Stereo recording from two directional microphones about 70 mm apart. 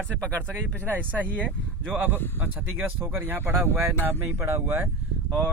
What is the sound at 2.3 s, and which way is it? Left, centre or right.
Speech, right.